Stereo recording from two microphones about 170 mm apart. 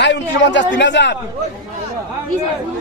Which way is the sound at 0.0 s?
90° left.